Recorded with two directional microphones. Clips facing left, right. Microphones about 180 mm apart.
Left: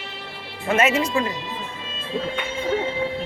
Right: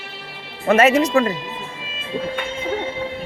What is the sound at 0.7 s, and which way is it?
Speech, 40° right (ahead or behind).